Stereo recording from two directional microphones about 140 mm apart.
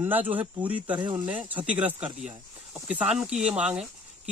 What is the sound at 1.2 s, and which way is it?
Speech, 10° right (ahead or behind).